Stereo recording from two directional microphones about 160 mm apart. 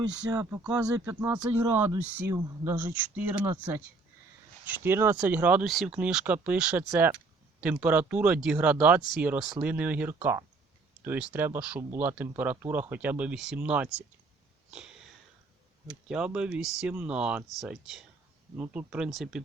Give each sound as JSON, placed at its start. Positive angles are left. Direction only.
{"t": 0.3, "sound": "speech", "side_deg": -25}
{"t": 1.0, "sound": "speech", "side_deg": -10}
{"t": 4.7, "sound": "speech", "side_deg": -15}
{"t": 14.7, "sound": "sniff", "side_deg": -5}
{"t": 16.0, "sound": "speech", "side_deg": -5}